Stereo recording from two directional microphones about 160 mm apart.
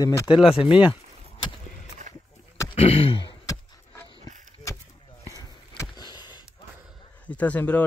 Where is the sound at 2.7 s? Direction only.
40° left (ahead or behind).